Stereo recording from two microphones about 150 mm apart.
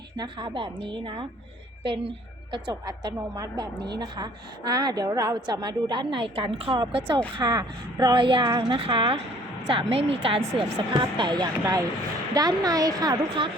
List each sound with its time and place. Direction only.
0.2 s a woman's voice: 30° right (ahead or behind)